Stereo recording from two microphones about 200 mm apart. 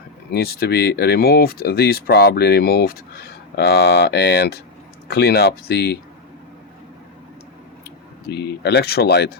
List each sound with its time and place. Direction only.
0.3 s speech: 50° left (ahead or behind)
8.3 s speech: 55° left (ahead or behind)